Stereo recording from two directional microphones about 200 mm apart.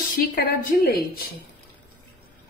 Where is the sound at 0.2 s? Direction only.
45° left (ahead or behind).